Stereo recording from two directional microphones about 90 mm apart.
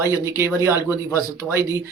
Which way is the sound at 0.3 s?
30° right (ahead or behind).